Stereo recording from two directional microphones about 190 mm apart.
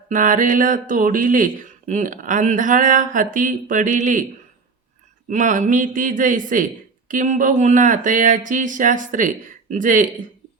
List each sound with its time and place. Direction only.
0.1 s speech: 45° right (ahead or behind)
5.3 s speech: 45° right (ahead or behind)